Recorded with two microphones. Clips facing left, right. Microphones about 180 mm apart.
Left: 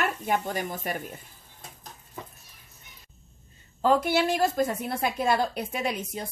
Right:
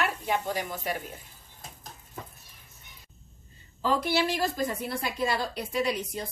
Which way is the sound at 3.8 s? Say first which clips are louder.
Left 4 dB; 50° left (ahead or behind).